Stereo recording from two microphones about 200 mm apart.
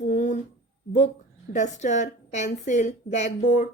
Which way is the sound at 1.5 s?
35° left (ahead or behind).